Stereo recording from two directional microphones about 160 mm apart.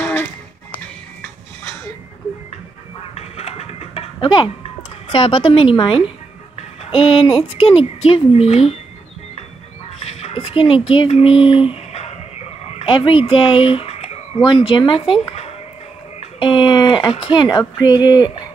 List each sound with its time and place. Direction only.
0.0 s music: 10° left (ahead or behind)
3.2 s a sound: 40° left (ahead or behind)
5.1 s speech: 35° left (ahead or behind)
9.9 s speech: 40° left (ahead or behind)